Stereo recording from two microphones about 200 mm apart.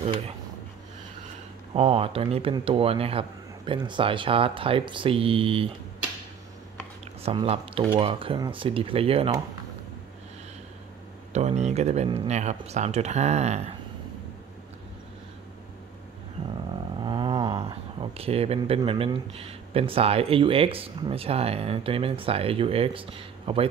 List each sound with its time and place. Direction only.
1.7 s speech: 30° right (ahead or behind)
7.2 s speech: 30° right (ahead or behind)
11.3 s speech: 35° right (ahead or behind)
17.0 s speech: 20° right (ahead or behind)